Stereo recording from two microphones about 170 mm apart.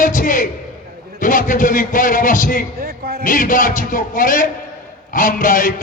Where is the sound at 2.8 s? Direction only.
65° right (ahead or behind).